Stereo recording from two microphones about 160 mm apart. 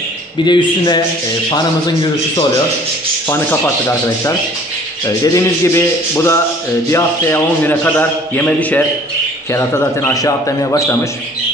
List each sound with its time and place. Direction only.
0.5 s a man's voice: 30° left (ahead or behind)
3.3 s a man's voice: 15° left (ahead or behind)